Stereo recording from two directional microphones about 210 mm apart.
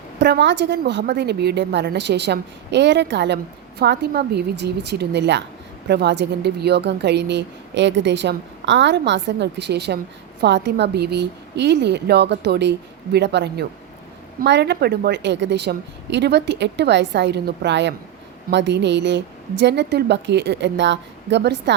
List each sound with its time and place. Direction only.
0.2 s a woman's voice: 55° right (ahead or behind)